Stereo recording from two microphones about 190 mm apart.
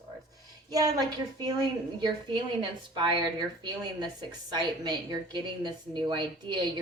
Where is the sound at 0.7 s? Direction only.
20° right (ahead or behind).